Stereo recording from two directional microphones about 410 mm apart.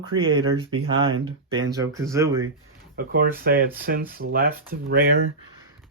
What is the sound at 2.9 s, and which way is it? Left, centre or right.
Speech, right.